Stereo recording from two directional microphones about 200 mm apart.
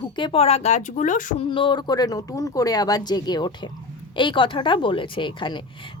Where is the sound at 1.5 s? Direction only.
25° left (ahead or behind).